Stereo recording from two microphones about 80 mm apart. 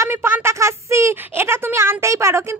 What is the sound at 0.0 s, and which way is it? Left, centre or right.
Speech, right.